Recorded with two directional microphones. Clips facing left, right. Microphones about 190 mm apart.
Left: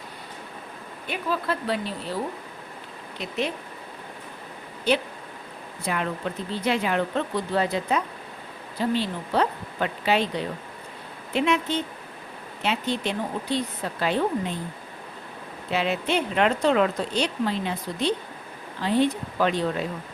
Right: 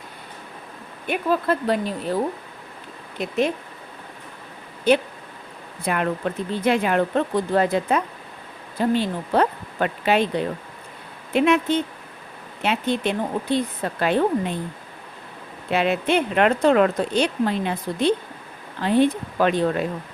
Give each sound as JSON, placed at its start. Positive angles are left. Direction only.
{"t": 1.0, "sound": "speech", "side_deg": -50}
{"t": 3.2, "sound": "speech", "side_deg": -50}
{"t": 4.9, "sound": "speech", "side_deg": -50}
{"t": 15.7, "sound": "speech", "side_deg": -55}